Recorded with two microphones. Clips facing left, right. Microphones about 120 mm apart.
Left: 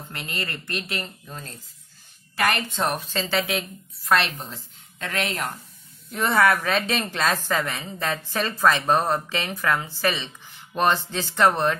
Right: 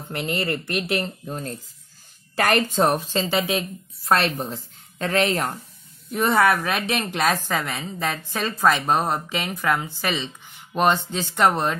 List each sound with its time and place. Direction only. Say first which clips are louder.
0.3 s speech: right 7 dB; 25° right (ahead or behind)
1.2 s a woman's voice: right 8 dB; 40° right (ahead or behind)
3.1 s a woman's voice: right 3 dB; 15° right (ahead or behind)
4.1 s a woman's voice: right 2 dB; 40° right (ahead or behind)
6.0 s speech: right 1 dB; 25° right (ahead or behind)
6.6 s a woman's voice: even; 10° right (ahead or behind)